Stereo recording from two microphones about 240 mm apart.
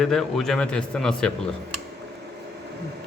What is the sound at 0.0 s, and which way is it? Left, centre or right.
Speech, centre.